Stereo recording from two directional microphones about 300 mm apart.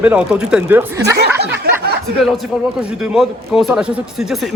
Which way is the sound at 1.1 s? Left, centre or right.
Right.